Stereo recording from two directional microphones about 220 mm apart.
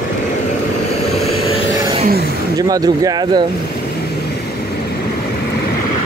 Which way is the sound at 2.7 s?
15° right (ahead or behind).